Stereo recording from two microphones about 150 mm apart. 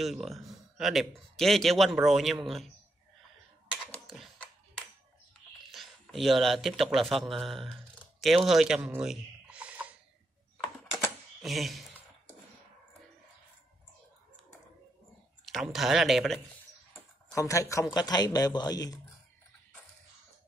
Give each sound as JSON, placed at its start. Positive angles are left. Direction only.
{"t": 0.0, "sound": "speech", "side_deg": 0}
{"t": 3.9, "sound": "a sound", "side_deg": 5}
{"t": 5.7, "sound": "speech", "side_deg": 0}
{"t": 8.2, "sound": "a sound", "side_deg": 0}
{"t": 11.4, "sound": "speech", "side_deg": 0}
{"t": 15.4, "sound": "speech", "side_deg": 0}
{"t": 17.3, "sound": "a man's voice", "side_deg": 20}